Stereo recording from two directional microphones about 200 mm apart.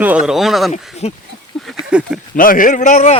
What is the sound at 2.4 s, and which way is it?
Speech, 45° left (ahead or behind).